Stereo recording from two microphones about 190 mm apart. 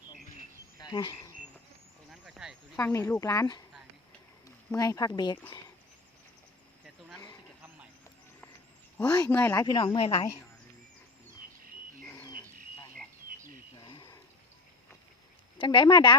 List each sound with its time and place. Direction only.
0.8 s insect: 20° left (ahead or behind)
2.2 s a sound: 5° right (ahead or behind)
2.7 s speech: 15° left (ahead or behind)
9.3 s speech: 10° left (ahead or behind)
9.6 s a woman's voice: 25° left (ahead or behind)
12.0 s livestock: 20° left (ahead or behind)
13.7 s a sound: 25° left (ahead or behind)
15.5 s speech: 25° left (ahead or behind)